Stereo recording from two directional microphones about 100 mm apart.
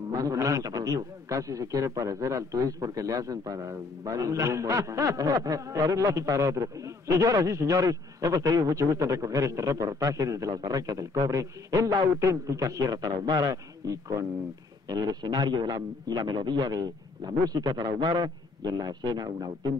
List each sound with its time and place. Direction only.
0.1 s a man's voice: 35° right (ahead or behind)